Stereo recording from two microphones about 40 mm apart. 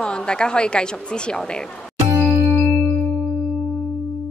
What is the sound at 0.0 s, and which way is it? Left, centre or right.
Speech, left.